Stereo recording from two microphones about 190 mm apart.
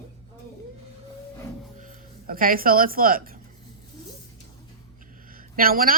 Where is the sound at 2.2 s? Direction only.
50° right (ahead or behind).